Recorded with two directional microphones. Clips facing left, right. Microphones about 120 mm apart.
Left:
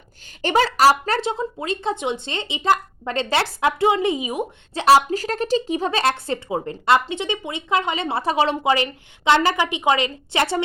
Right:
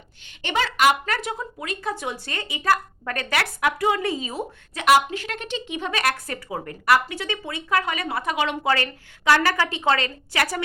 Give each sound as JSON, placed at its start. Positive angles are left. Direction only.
{"t": 0.4, "sound": "speech", "side_deg": 35}
{"t": 4.7, "sound": "speech", "side_deg": 30}
{"t": 8.6, "sound": "speech", "side_deg": 20}